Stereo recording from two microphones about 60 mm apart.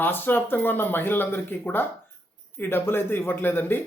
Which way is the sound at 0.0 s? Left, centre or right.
Left.